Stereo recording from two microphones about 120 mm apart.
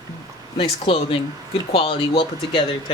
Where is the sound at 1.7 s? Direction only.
50° left (ahead or behind).